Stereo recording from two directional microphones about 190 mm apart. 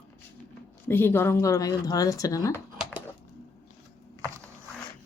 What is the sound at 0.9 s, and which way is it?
Speech, 10° left (ahead or behind).